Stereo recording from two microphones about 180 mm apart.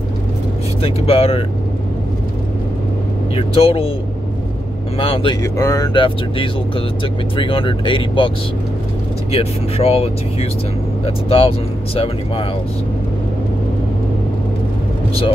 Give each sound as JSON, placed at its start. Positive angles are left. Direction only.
{"t": 0.8, "sound": "speech", "side_deg": 30}
{"t": 3.3, "sound": "speech", "side_deg": 30}
{"t": 4.9, "sound": "speech", "side_deg": 30}
{"t": 9.3, "sound": "speech", "side_deg": 35}